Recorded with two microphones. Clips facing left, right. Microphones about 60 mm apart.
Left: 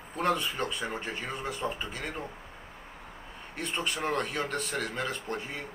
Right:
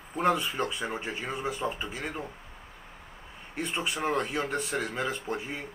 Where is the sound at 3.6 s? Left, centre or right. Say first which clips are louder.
Right 1 dB; centre.